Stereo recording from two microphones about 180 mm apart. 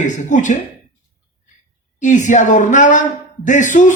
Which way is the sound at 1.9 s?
45° left (ahead or behind).